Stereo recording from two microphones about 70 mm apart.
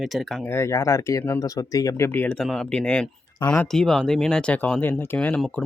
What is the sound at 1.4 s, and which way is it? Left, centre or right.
Speech, left.